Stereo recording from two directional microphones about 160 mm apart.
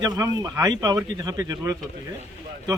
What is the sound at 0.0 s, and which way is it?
A man's voice, 25° right (ahead or behind).